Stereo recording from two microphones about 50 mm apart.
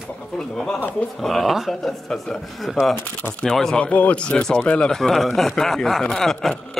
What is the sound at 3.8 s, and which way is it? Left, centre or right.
Speech, left.